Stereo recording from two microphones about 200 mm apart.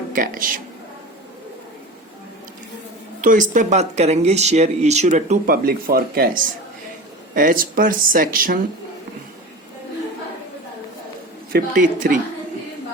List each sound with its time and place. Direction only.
0.1 s speech: 45° right (ahead or behind)
3.2 s speech: 40° right (ahead or behind)
11.5 s speech: 45° right (ahead or behind)